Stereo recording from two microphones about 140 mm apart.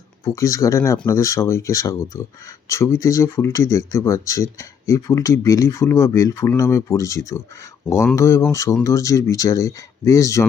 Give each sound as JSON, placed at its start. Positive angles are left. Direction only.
{"t": 0.3, "sound": "speech", "side_deg": 25}